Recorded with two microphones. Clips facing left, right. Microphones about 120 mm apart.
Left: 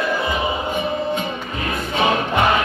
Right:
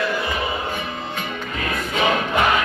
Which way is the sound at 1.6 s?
30° left (ahead or behind).